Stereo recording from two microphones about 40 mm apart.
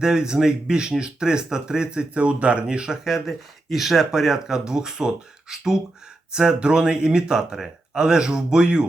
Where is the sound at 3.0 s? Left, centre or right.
Centre.